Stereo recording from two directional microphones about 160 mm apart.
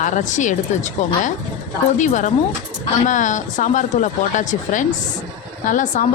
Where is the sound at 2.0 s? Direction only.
50° left (ahead or behind).